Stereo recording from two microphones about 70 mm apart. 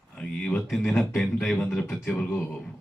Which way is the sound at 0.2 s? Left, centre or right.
Centre.